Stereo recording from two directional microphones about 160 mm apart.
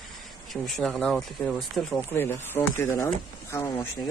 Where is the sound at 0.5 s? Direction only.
Centre (ahead or behind).